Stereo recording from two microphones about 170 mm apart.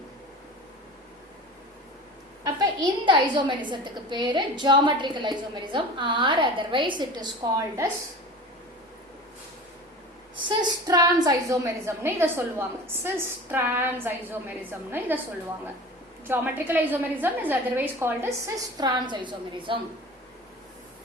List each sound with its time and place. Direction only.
2.4 s a woman's voice: 25° right (ahead or behind)
10.6 s a woman's voice: 20° right (ahead or behind)
16.2 s a woman's voice: 10° right (ahead or behind); by 19.8 s 30° right (ahead or behind)